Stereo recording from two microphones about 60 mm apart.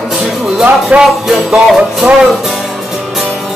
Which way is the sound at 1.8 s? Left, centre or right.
Centre.